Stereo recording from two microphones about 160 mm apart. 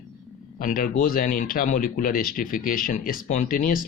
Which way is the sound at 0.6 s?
60° left (ahead or behind).